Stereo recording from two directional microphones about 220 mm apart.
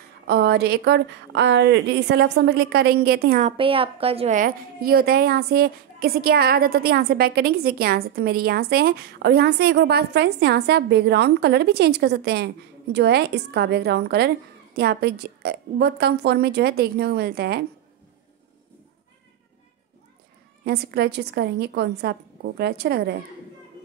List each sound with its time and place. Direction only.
0.3 s a woman's voice: 45° right (ahead or behind)
3.4 s a woman's voice: 25° right (ahead or behind); by 17.6 s 45° right (ahead or behind)
20.6 s a woman's voice: 45° right (ahead or behind)